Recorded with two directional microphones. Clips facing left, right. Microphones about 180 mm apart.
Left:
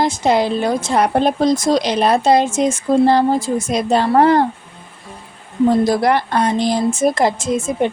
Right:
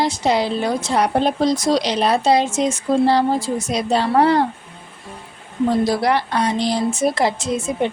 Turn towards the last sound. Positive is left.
turn(degrees=50)  # may be behind; listen again after turning